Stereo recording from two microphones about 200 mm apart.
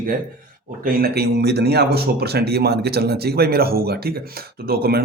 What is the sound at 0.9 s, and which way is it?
Speech, 50° right (ahead or behind).